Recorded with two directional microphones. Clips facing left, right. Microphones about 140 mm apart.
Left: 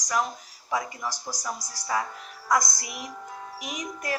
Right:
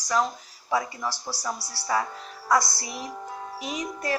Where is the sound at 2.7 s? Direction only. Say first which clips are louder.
Right 3 dB; 30° right (ahead or behind).